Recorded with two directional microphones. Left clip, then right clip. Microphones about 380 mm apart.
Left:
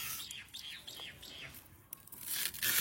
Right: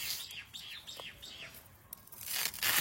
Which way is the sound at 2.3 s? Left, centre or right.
Centre.